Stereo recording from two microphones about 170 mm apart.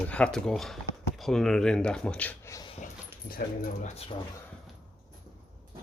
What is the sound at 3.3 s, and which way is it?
Speech, 55° left (ahead or behind).